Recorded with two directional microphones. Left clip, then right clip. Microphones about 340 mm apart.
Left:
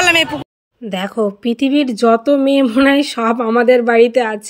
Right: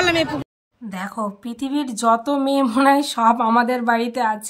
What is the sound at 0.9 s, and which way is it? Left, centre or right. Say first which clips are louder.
Speech: left 8 dB; centre.